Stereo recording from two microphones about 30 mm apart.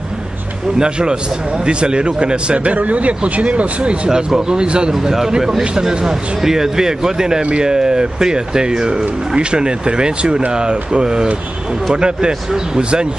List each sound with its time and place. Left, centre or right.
0.7 s speech: right
2.7 s speech: right
4.4 s speech: right
5.6 s speech: right